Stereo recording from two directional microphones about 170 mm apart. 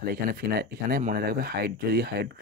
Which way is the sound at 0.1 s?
65° right (ahead or behind).